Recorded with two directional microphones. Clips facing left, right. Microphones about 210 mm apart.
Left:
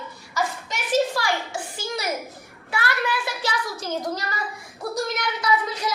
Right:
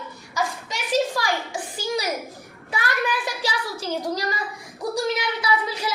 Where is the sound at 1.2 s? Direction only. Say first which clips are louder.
Even; 15° right (ahead or behind).